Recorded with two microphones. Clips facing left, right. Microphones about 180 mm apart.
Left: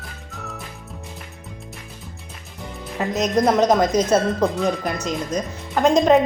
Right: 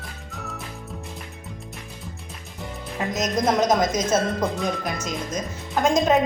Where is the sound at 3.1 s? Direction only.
35° left (ahead or behind).